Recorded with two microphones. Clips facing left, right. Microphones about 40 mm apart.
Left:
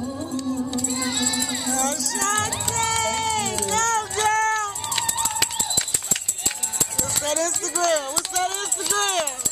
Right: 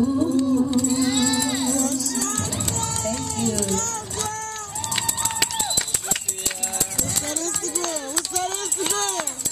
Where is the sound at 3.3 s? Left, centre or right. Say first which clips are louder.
Left 1 dB; left.